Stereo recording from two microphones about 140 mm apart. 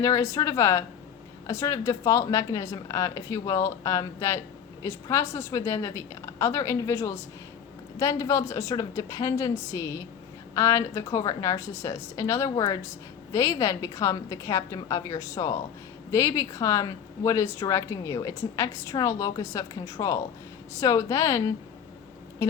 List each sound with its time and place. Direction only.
0.0 s a woman's voice: 25° left (ahead or behind)